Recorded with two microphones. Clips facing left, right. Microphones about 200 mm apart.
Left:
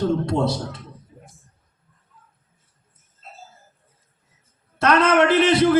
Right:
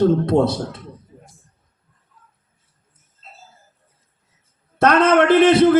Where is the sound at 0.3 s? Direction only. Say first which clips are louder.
Right 5 dB; 55° right (ahead or behind).